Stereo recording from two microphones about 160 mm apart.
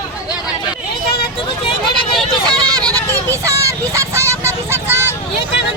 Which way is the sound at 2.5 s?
25° right (ahead or behind).